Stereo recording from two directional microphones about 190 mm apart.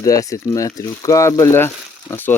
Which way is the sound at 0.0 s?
15° left (ahead or behind).